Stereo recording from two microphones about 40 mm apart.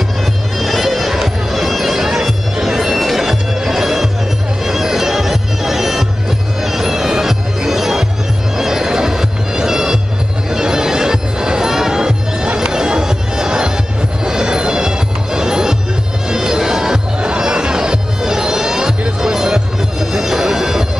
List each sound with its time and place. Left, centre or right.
0.6 s bagpipes: centre
3.1 s music: centre
4.6 s bagpipes: centre
6.6 s music: centre